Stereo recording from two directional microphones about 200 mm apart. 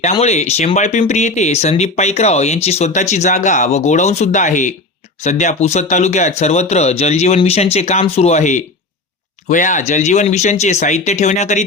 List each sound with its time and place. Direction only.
0.0 s speech: 35° left (ahead or behind)